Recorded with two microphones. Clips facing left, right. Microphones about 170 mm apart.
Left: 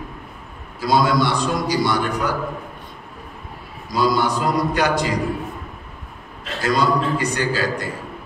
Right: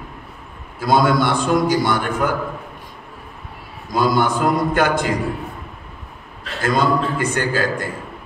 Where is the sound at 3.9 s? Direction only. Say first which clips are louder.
Right 1 dB; 50° right (ahead or behind).